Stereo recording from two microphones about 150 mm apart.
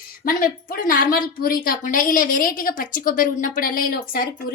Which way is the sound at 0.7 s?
70° left (ahead or behind).